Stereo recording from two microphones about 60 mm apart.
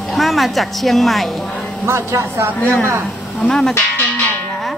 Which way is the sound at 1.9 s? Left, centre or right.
Right.